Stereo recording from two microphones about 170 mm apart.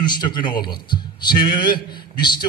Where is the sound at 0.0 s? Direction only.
25° left (ahead or behind).